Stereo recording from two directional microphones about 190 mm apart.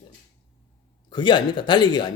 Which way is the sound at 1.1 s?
25° left (ahead or behind).